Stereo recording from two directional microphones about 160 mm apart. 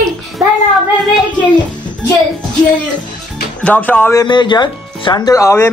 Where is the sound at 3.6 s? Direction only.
10° left (ahead or behind).